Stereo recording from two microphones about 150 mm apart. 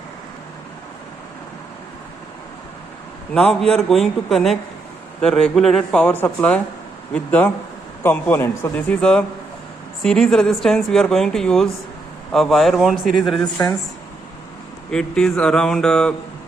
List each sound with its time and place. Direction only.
3.3 s a man's voice: 5° left (ahead or behind)
13.4 s a woman's voice: 25° left (ahead or behind)
14.8 s speech: 5° left (ahead or behind)